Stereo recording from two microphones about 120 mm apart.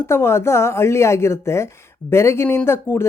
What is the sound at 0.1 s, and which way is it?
Speech, 20° left (ahead or behind).